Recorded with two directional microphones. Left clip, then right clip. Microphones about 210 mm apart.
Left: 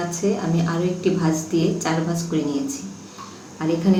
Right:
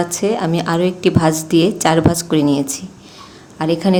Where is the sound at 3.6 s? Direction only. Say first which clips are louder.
Right 6 dB; 55° right (ahead or behind).